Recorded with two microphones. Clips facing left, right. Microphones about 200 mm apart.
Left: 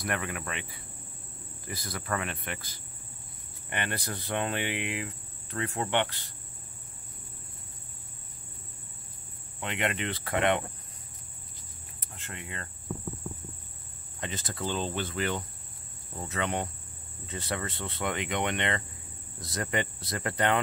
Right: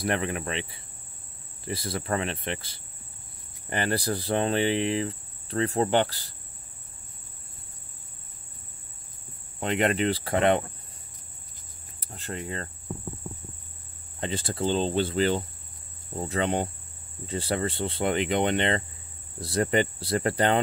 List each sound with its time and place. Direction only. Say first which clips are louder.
0.0 s cricket: right 6 dB; 30° right (ahead or behind)
3.7 s speech: right 8 dB; 35° right (ahead or behind)
9.6 s speech: right 7 dB; 40° right (ahead or behind)
12.0 s speech: right 9 dB; 35° right (ahead or behind)
14.2 s cricket: right 7 dB; 30° right (ahead or behind)
16.2 s speech: right 5 dB; 30° right (ahead or behind)